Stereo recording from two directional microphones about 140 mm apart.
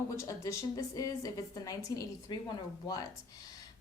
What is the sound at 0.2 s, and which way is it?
A woman's voice, 20° left (ahead or behind).